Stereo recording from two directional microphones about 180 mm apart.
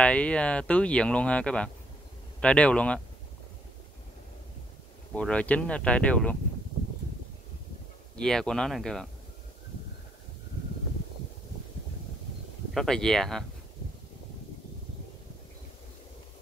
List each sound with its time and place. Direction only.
0.0 s speech: 5° left (ahead or behind)
5.1 s speech: 5° left (ahead or behind)
8.2 s speech: 5° left (ahead or behind)
12.7 s speech: 5° left (ahead or behind)